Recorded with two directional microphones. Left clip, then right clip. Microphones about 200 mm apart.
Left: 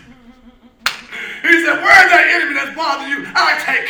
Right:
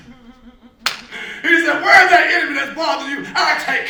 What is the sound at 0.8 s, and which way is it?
Speech, 5° left (ahead or behind).